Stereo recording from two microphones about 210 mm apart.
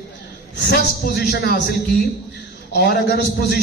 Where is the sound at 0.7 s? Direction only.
50° left (ahead or behind).